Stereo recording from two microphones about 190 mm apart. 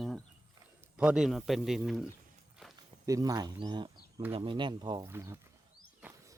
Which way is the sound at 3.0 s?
20° right (ahead or behind).